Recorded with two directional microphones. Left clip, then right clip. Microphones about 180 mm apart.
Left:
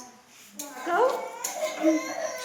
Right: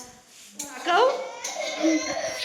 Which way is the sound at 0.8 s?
20° right (ahead or behind).